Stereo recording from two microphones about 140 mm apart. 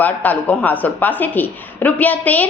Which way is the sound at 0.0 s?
10° left (ahead or behind).